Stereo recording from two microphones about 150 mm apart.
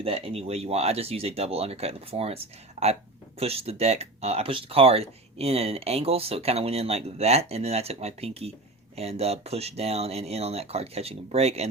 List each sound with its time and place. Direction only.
0.0 s speech: 40° right (ahead or behind)